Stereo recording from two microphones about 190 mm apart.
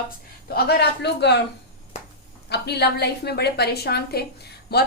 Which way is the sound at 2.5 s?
60° left (ahead or behind).